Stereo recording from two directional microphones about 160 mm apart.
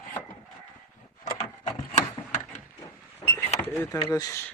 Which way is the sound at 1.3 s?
30° left (ahead or behind).